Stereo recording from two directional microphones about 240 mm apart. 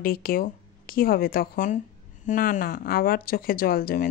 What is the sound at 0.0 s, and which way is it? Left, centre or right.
Speech, left.